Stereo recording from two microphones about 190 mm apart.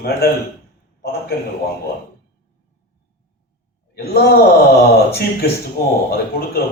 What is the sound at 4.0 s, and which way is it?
Speech, 55° left (ahead or behind).